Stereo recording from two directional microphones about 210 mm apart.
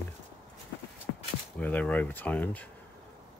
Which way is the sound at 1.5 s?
5° left (ahead or behind).